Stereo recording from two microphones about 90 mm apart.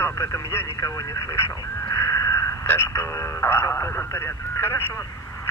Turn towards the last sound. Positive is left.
turn(degrees=25)  # may be behind; listen again after turning